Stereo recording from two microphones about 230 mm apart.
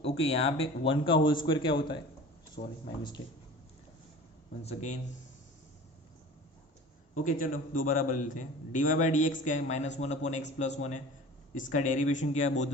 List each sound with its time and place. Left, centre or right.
0.2 s a man's voice: left
2.6 s a man's voice: left
4.6 s a man's voice: left
7.2 s a man's voice: left